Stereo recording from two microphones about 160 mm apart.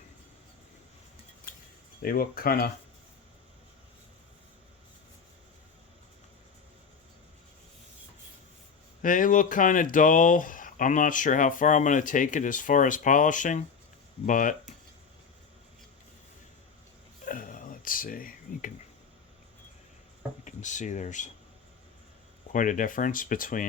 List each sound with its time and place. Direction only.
2.0 s speech: 65° left (ahead or behind)
9.0 s speech: 55° left (ahead or behind)
17.2 s a sound: 55° left (ahead or behind)
20.4 s speech: 50° left (ahead or behind)
22.5 s speech: 55° left (ahead or behind)